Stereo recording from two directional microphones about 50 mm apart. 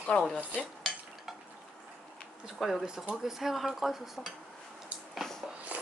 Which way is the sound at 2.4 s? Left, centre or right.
Centre.